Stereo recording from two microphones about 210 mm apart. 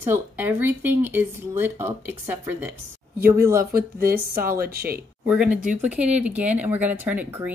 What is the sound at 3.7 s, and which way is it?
Speech, 45° right (ahead or behind).